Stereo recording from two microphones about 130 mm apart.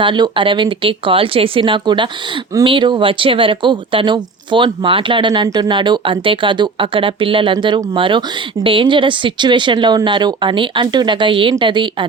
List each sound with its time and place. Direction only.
0.0 s speech: 40° right (ahead or behind)